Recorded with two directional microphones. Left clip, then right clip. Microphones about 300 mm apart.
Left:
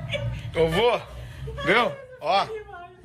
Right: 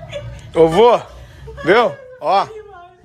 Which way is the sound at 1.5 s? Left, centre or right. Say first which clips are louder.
Right 8 dB; right.